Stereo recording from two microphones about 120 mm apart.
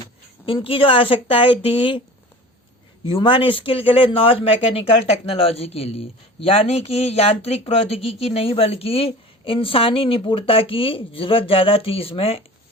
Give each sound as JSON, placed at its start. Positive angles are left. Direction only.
{"t": 0.4, "sound": "speech", "side_deg": 50}
{"t": 3.1, "sound": "speech", "side_deg": 45}